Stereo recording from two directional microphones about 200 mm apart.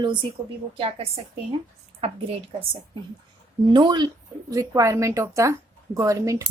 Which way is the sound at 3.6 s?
20° right (ahead or behind).